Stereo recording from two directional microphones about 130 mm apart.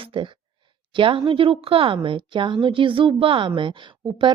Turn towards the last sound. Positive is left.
turn(degrees=-40)  # may be behind; listen again after turning